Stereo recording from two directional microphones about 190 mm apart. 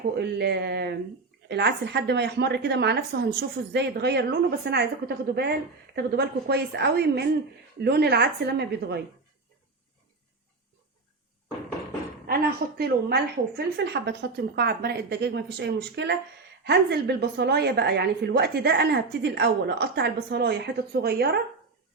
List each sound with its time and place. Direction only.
0.2 s a woman's voice: 60° right (ahead or behind)
12.2 s a woman's voice: 55° right (ahead or behind)